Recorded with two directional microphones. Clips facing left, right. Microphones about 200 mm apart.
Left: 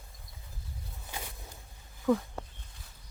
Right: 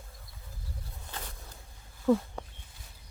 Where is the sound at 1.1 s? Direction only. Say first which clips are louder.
Left 1 dB; 10° left (ahead or behind).